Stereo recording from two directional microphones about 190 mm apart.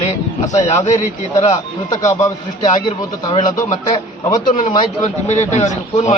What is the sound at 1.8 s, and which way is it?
A man's voice, 15° left (ahead or behind).